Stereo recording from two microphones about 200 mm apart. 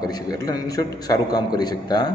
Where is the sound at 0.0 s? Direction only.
20° left (ahead or behind).